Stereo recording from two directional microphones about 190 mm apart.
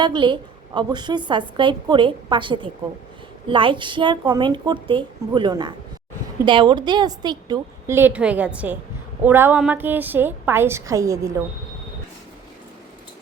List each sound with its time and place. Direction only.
0.0 s a woman's voice: 25° right (ahead or behind)